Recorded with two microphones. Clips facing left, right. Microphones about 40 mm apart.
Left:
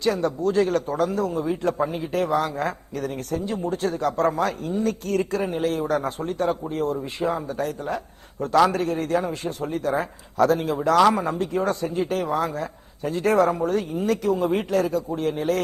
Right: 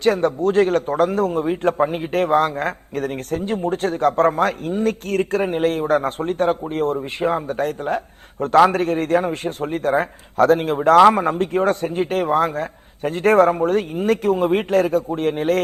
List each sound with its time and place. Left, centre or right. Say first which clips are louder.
0.0 s a man's voice: right 5 dB; right